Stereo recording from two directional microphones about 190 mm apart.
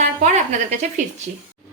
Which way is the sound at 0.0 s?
40° right (ahead or behind).